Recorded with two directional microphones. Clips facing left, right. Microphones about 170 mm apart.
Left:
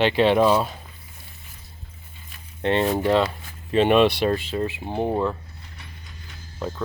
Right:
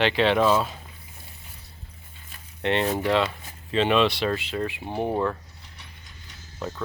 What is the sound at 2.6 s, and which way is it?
Speech, 40° left (ahead or behind).